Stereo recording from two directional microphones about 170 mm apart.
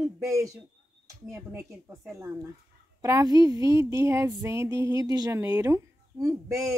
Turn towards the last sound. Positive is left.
turn(degrees=-20)  # may be behind; listen again after turning